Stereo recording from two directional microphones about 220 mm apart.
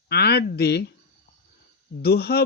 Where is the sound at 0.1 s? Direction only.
45° left (ahead or behind).